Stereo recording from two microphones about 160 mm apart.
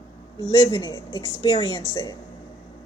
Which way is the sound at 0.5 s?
25° left (ahead or behind).